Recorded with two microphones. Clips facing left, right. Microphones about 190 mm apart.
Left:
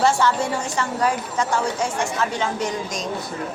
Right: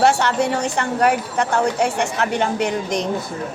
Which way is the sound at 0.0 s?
65° right (ahead or behind).